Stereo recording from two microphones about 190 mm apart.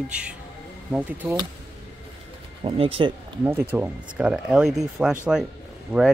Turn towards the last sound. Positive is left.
turn(degrees=-5)  # may be behind; listen again after turning